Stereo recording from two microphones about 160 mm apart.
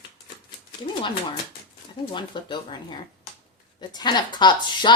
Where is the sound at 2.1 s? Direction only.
30° left (ahead or behind).